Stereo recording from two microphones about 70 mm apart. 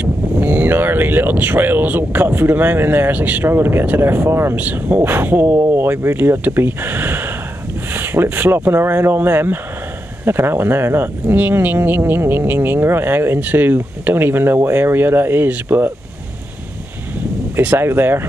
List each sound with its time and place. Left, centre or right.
0.0 s speech: right
4.6 s speech: right
17.6 s speech: right